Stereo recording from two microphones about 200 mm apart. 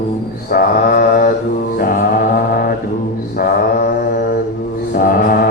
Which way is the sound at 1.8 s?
45° left (ahead or behind).